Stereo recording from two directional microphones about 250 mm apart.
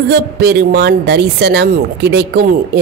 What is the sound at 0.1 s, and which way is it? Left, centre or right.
Speech, right.